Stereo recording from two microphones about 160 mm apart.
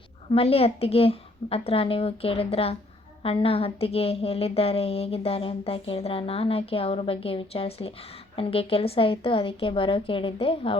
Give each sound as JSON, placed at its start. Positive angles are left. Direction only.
{"t": 0.3, "sound": "a woman's voice", "side_deg": 35}